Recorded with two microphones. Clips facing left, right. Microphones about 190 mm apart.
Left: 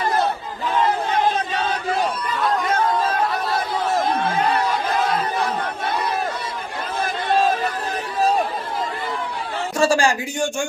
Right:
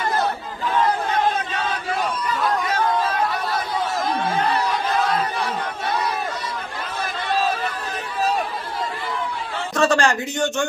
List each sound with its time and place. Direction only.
2.4 s chatter: centre (ahead or behind)
4.0 s a sound: 25° left (ahead or behind)
9.7 s speech: 10° left (ahead or behind)